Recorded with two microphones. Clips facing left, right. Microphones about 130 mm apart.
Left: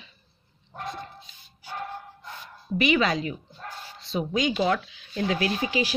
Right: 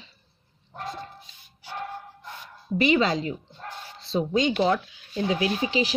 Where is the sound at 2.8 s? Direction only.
30° right (ahead or behind).